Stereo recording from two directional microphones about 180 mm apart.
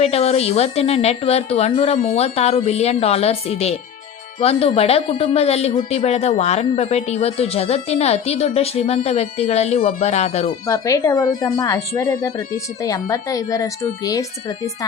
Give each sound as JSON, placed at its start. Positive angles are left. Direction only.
{"t": 0.0, "sound": "a woman's voice", "side_deg": 35}
{"t": 10.7, "sound": "speech", "side_deg": 20}